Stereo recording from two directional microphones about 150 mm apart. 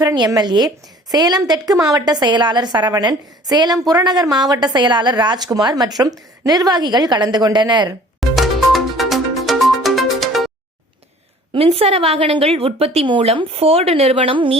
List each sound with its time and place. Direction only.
0.0 s a woman's voice: 25° right (ahead or behind)
8.4 s music: centre (ahead or behind)
11.5 s a woman's voice: 40° right (ahead or behind)